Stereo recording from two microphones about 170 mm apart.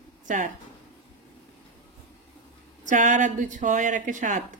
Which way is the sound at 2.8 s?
50° right (ahead or behind).